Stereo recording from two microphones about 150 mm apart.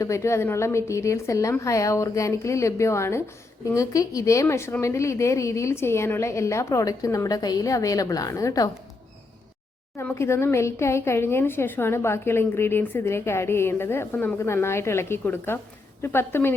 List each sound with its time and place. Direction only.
0.0 s a woman's voice: 20° left (ahead or behind)
10.0 s speech: 15° left (ahead or behind)